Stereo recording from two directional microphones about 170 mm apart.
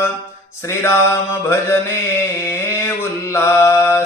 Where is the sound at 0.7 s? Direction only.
15° left (ahead or behind).